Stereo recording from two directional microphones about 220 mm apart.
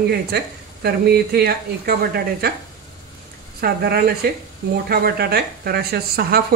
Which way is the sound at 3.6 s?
45° right (ahead or behind).